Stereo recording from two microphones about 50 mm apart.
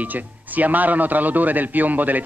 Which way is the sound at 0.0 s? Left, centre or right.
Right.